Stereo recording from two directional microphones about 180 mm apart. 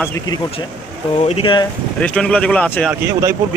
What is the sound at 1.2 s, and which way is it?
Speech, 35° left (ahead or behind).